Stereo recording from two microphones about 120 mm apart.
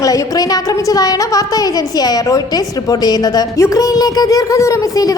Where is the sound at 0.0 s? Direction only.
30° left (ahead or behind).